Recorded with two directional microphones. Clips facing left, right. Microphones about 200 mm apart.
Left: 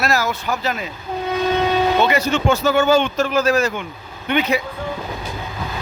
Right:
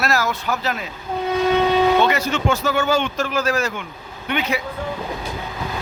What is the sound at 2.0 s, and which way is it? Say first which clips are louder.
Vehicle: left 1 dB; 15° left (ahead or behind).